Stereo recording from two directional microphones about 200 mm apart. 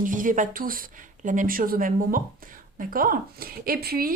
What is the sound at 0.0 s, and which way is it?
Speech, 40° right (ahead or behind).